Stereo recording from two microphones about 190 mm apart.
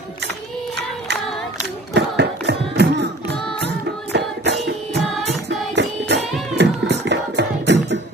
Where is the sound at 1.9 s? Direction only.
65° right (ahead or behind).